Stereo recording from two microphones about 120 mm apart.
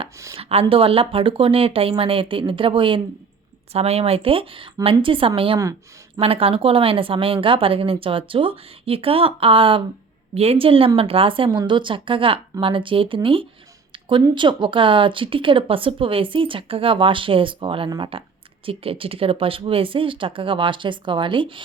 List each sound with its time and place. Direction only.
0.3 s speech: 55° right (ahead or behind)
3.7 s speech: 60° right (ahead or behind)
10.3 s speech: 60° right (ahead or behind)